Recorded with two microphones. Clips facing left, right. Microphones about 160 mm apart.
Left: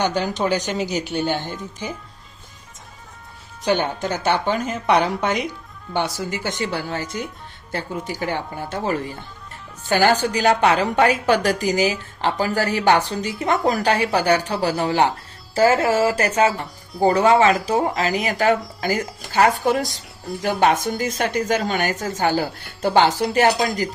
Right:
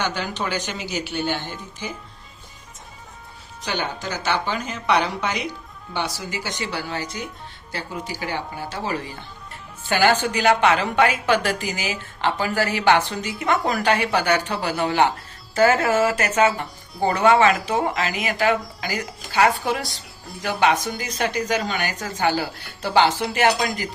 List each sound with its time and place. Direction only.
0.0 s a woman's voice: 40° left (ahead or behind)
3.6 s speech: 50° left (ahead or behind)
9.9 s a woman's voice: 40° left (ahead or behind)